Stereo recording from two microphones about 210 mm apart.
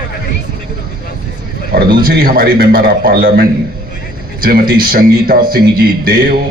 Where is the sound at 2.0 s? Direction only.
45° right (ahead or behind).